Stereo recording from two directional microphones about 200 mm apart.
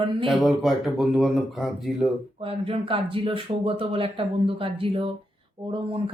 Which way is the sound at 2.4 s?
25° right (ahead or behind).